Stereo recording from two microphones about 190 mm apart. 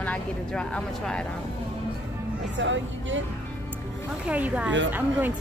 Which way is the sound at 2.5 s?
80° right.